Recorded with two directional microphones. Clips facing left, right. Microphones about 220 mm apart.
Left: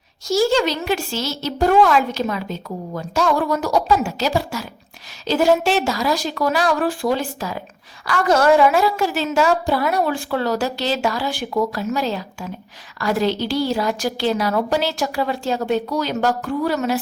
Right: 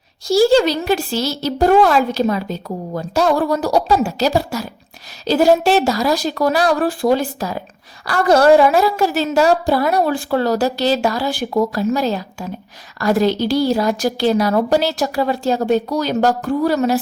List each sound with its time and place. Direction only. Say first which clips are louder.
0.3 s a woman's voice: right 5 dB; 35° right (ahead or behind)